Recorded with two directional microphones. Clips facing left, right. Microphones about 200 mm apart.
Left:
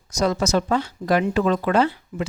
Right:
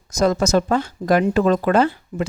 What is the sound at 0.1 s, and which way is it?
Speech, 45° right (ahead or behind).